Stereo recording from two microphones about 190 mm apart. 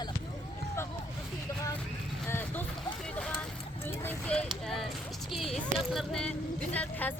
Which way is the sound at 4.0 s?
10° left (ahead or behind).